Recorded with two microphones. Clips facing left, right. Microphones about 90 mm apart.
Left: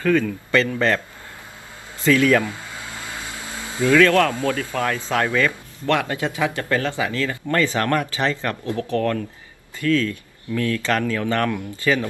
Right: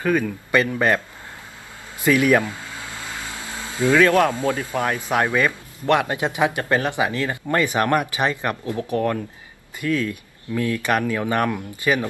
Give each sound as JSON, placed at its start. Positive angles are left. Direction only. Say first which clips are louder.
{"t": 0.0, "sound": "speech", "louder": "left 2 dB", "side_deg": -15}
{"t": 3.8, "sound": "a man's voice", "louder": "even", "side_deg": -20}